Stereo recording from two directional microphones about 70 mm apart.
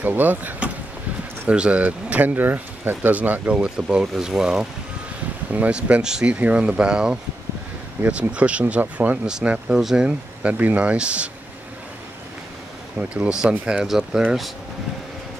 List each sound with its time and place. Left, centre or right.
0.0 s speech: right
4.0 s speech: centre
5.5 s speech: right
9.7 s speech: centre
10.4 s speech: right
13.1 s speech: centre